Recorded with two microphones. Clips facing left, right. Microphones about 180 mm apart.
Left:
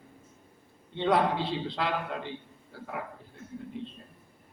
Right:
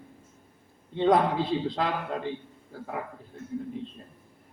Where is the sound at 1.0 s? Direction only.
45° right (ahead or behind).